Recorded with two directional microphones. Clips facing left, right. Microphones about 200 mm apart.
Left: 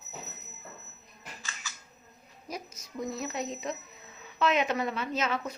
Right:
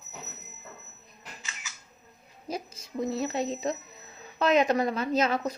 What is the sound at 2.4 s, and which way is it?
A woman's voice, 30° right (ahead or behind).